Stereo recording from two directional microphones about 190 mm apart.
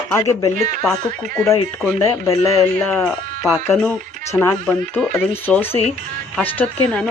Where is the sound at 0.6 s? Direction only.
40° right (ahead or behind).